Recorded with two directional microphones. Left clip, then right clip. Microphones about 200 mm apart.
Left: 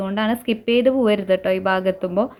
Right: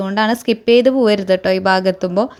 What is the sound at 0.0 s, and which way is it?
A woman's voice, 45° right (ahead or behind).